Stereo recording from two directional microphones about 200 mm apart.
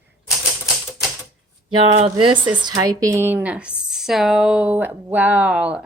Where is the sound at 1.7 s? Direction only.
30° right (ahead or behind).